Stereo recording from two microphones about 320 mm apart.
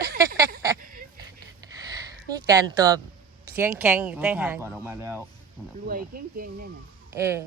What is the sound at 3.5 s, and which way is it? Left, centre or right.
Speech, centre.